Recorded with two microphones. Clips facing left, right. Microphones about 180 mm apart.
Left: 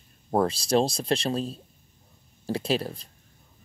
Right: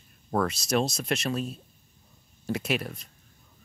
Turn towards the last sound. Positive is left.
turn(degrees=30)  # may be behind; listen again after turning